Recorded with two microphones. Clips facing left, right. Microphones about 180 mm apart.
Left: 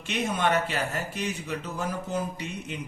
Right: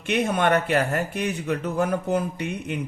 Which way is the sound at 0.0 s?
60° right (ahead or behind).